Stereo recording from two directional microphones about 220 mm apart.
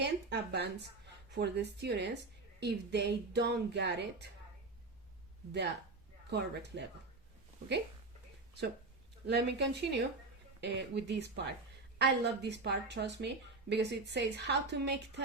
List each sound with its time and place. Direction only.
0.0 s a woman's voice: 50° right (ahead or behind)
5.5 s a woman's voice: 50° right (ahead or behind)
9.2 s a woman's voice: 50° right (ahead or behind)